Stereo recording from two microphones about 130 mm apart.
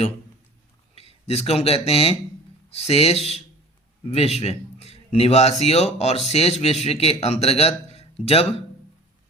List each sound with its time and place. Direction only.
0.9 s a man's voice: 50° left (ahead or behind)